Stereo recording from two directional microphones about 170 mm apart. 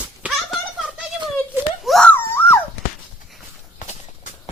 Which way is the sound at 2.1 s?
15° left (ahead or behind).